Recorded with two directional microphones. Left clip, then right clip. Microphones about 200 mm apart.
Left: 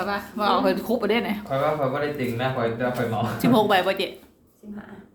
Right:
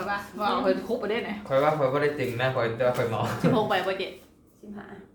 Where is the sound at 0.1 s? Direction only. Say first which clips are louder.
Left 4 dB; 60° left (ahead or behind).